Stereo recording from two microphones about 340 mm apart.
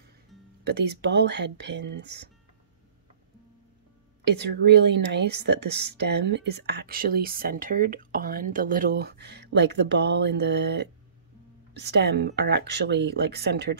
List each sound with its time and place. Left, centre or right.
0.7 s speech: right
4.2 s a woman's voice: right